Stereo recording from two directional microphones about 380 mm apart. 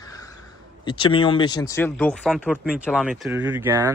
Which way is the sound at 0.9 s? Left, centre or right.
Centre.